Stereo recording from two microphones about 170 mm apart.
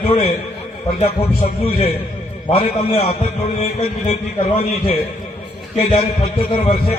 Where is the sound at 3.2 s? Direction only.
40° left (ahead or behind).